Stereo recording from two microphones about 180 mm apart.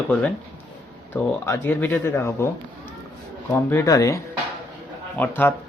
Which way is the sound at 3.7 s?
20° left (ahead or behind).